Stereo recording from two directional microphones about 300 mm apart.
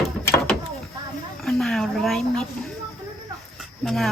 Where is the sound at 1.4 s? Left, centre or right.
Centre.